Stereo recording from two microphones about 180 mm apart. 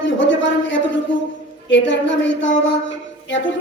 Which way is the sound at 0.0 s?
90° left.